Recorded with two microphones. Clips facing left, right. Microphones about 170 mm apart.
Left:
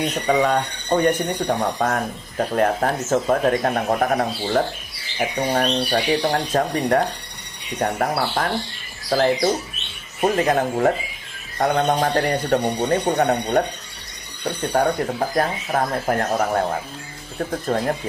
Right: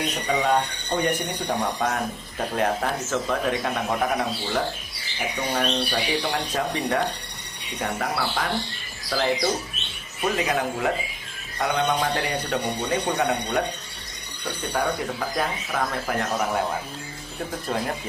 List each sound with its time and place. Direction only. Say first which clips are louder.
0.3 s speech: left 3 dB; 50° left (ahead or behind)
14.7 s speech: left 6 dB; 40° left (ahead or behind)